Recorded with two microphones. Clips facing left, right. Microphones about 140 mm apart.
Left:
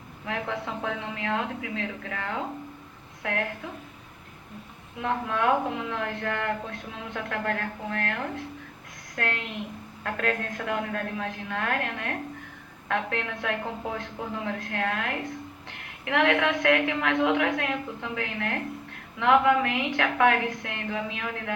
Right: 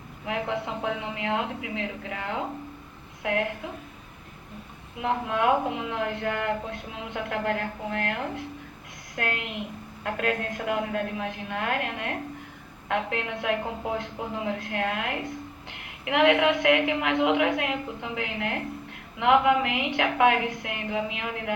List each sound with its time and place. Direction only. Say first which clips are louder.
0.3 s a woman's voice: right 2 dB; 20° right (ahead or behind)
4.9 s a woman's voice: right 1 dB; 20° right (ahead or behind)